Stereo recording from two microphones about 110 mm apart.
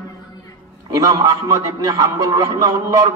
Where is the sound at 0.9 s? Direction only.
30° right (ahead or behind).